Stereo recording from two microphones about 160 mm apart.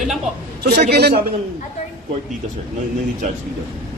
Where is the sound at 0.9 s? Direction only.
90° right.